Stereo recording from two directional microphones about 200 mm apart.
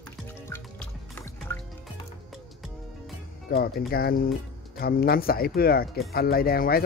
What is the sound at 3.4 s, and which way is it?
Speech, 50° left (ahead or behind).